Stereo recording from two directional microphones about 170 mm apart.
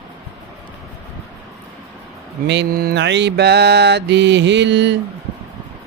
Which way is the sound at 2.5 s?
75° right (ahead or behind).